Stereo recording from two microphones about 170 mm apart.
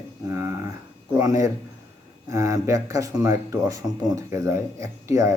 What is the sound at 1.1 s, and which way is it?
A man's voice, 20° right (ahead or behind).